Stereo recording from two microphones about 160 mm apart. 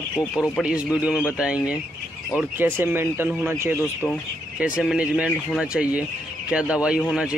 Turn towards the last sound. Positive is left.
turn(degrees=-5)  # may be behind; listen again after turning